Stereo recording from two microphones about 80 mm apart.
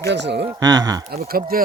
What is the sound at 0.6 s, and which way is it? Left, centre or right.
Speech, right.